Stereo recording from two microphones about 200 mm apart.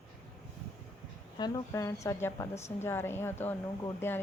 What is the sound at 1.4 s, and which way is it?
Speech, 15° left (ahead or behind).